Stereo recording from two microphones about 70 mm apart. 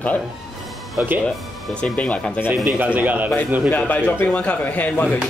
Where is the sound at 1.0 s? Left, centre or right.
Right.